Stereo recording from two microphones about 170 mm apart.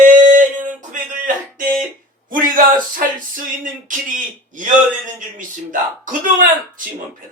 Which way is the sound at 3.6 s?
50° right (ahead or behind).